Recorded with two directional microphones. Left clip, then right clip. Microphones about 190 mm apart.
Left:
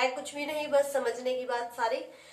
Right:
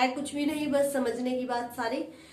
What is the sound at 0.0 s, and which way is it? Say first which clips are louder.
A woman's voice: right 2 dB; 10° left (ahead or behind).